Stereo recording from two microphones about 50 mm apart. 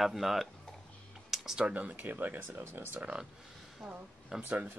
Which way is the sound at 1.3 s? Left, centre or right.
Centre.